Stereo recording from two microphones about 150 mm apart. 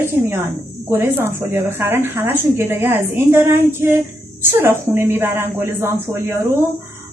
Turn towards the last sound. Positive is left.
turn(degrees=-15)  # may be behind; listen again after turning